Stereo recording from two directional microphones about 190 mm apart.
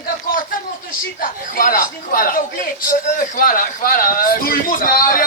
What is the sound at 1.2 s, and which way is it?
A man's voice, 45° left (ahead or behind).